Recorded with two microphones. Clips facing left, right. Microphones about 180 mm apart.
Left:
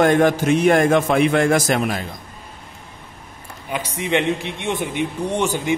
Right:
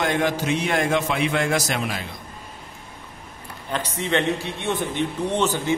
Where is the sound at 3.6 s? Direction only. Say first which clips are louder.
Left 2 dB; 10° left (ahead or behind).